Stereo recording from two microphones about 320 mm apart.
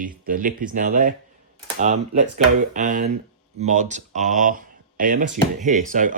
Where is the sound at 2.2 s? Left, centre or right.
Right.